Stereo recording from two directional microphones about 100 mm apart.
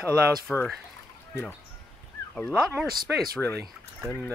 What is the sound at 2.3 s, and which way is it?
Speech, 15° left (ahead or behind).